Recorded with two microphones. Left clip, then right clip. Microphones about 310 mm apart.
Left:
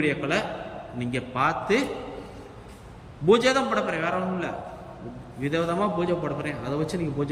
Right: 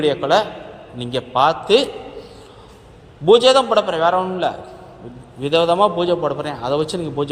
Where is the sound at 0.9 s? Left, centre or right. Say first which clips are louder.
Right 10 dB; centre.